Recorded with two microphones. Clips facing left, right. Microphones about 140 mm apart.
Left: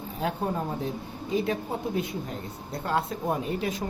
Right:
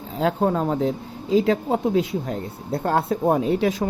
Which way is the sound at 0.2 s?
90° right.